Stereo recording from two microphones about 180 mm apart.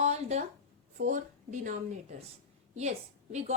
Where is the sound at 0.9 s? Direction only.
45° right (ahead or behind).